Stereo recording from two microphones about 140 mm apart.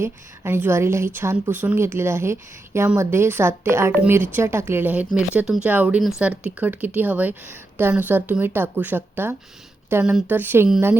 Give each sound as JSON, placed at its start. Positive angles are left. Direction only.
{"t": 0.0, "sound": "a woman's voice", "side_deg": -15}